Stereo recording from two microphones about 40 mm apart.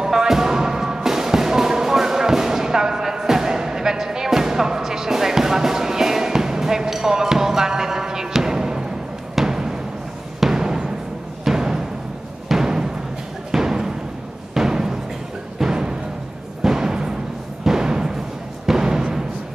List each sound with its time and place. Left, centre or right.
0.0 s music: centre
9.3 s a sound: centre
10.4 s music: centre
12.4 s timpani: centre
13.5 s music: centre